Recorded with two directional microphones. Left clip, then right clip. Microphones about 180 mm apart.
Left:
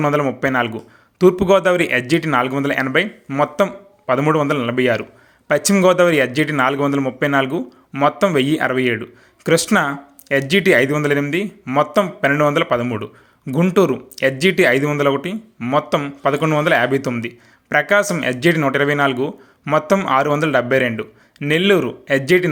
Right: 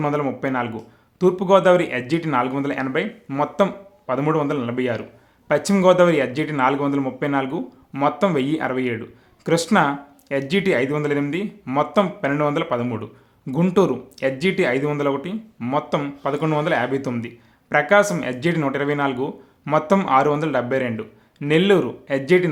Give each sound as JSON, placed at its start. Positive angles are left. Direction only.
{"t": 0.0, "sound": "a man's voice", "side_deg": 10}